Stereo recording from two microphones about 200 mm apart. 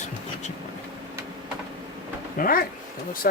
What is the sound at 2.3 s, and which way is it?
Speech, 45° left (ahead or behind).